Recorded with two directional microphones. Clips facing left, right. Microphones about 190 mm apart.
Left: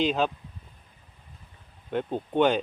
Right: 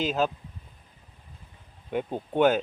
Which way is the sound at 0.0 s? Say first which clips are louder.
Left 1 dB; centre (ahead or behind).